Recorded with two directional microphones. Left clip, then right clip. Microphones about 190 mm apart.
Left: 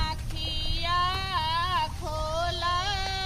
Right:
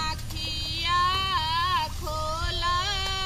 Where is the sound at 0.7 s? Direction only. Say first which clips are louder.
Right 3 dB; 35° left (ahead or behind).